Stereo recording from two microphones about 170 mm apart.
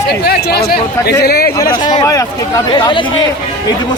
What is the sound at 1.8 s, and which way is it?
Speech, 20° left (ahead or behind).